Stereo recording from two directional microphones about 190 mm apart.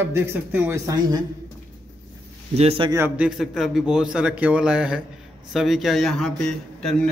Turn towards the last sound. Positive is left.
turn(degrees=5)  # may be behind; listen again after turning